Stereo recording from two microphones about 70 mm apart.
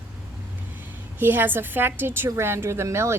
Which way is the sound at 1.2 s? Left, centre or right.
Right.